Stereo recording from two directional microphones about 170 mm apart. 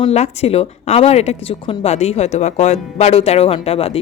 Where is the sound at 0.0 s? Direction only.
40° left (ahead or behind).